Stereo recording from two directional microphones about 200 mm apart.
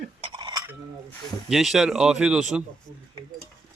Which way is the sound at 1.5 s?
Centre (ahead or behind).